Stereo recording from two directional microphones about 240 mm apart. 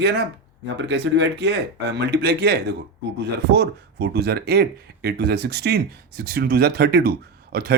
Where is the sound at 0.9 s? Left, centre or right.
Right.